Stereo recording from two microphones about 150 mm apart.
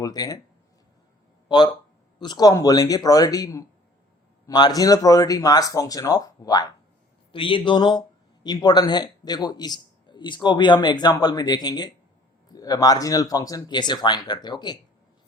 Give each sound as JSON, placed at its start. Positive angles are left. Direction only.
{"t": 0.0, "sound": "a man's voice", "side_deg": 25}
{"t": 1.5, "sound": "a man's voice", "side_deg": 30}
{"t": 7.3, "sound": "a man's voice", "side_deg": 35}